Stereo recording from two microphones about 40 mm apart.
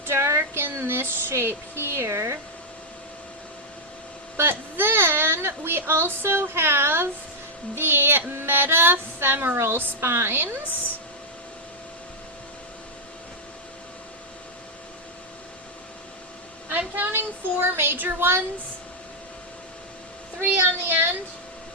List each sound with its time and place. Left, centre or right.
0.1 s a sound: right
1.1 s speech: right
4.4 s a woman's voice: right
7.8 s music: right
9.6 s speech: right
16.6 s a woman's voice: right
17.9 s speech: right
20.5 s music: right